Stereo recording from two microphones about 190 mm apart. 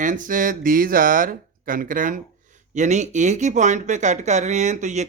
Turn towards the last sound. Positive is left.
turn(degrees=-40)  # may be behind; listen again after turning